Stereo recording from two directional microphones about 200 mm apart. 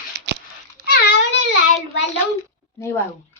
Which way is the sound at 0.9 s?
55° left (ahead or behind).